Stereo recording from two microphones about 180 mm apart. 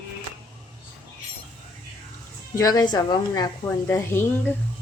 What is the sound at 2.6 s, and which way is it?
A woman's voice, 20° left (ahead or behind).